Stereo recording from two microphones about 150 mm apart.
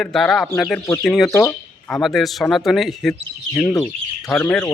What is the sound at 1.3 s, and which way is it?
Speech, 20° left (ahead or behind).